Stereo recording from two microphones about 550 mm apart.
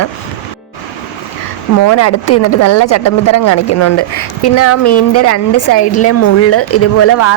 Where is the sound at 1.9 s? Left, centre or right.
Left.